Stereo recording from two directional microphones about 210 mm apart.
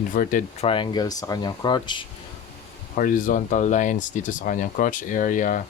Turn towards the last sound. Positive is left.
turn(degrees=40)  # may be behind; listen again after turning